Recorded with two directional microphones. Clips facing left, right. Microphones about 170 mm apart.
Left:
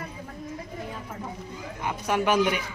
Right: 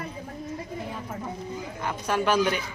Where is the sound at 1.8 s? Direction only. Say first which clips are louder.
Left 1 dB; 15° left (ahead or behind).